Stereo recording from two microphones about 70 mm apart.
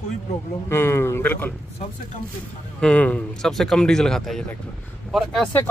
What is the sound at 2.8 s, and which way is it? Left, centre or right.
Speech, left.